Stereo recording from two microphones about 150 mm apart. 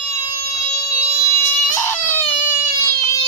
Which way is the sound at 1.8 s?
15° left (ahead or behind).